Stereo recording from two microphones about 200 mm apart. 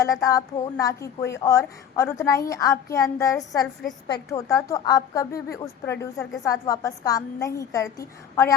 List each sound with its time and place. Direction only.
0.0 s speech: 15° left (ahead or behind)